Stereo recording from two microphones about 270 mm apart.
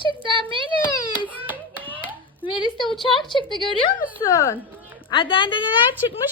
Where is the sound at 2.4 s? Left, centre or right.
Centre.